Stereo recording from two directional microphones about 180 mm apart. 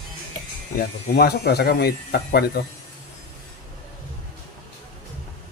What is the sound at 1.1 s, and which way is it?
Speech, 60° left (ahead or behind).